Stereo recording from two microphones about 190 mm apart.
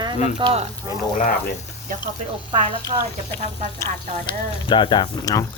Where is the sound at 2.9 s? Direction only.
35° right (ahead or behind).